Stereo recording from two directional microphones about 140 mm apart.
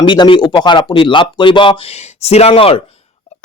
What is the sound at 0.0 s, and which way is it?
A man's voice, 35° left (ahead or behind).